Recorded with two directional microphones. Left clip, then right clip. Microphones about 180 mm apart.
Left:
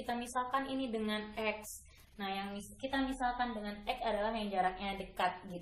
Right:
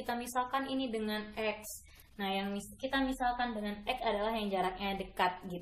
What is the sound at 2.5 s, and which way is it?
Speech, 15° right (ahead or behind).